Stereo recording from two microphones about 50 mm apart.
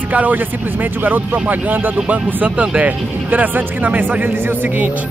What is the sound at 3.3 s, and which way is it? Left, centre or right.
A man's voice, right.